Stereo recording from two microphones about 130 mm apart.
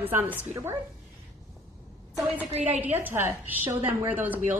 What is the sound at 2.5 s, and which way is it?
Speech, 60° right (ahead or behind).